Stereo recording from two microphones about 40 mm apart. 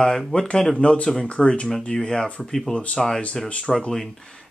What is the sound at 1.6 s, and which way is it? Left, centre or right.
Speech, centre.